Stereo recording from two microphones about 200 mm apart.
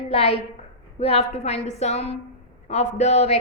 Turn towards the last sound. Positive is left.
turn(degrees=30)  # may be behind; listen again after turning